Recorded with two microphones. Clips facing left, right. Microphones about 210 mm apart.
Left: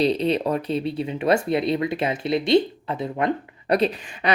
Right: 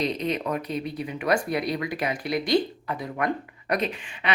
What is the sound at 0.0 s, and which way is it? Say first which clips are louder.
Speech: left 6 dB; 30° left (ahead or behind).